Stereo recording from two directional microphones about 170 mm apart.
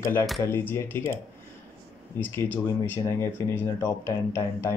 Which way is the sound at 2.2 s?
10° left (ahead or behind).